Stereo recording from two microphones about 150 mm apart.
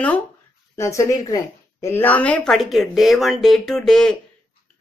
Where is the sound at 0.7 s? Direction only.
20° left (ahead or behind).